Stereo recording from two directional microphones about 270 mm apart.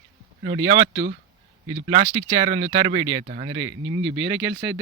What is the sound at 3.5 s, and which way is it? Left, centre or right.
Speech, right.